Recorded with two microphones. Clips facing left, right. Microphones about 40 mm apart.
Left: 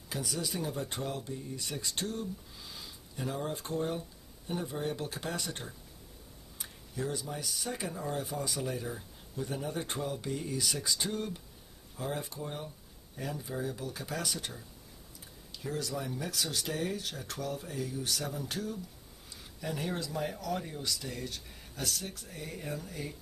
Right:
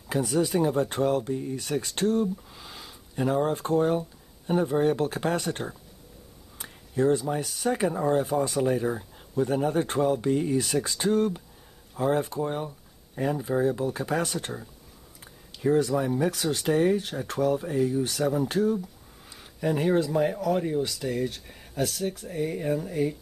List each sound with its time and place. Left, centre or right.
0.1 s speech: right